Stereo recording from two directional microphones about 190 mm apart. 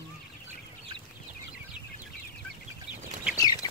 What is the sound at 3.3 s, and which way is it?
Bird, 20° left (ahead or behind).